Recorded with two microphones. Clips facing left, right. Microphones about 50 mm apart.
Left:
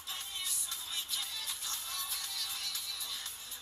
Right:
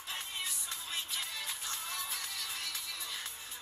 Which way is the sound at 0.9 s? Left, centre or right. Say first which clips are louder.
Right 2 dB; right.